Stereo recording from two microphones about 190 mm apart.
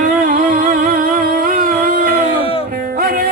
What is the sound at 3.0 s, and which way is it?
Music, 50° right (ahead or behind).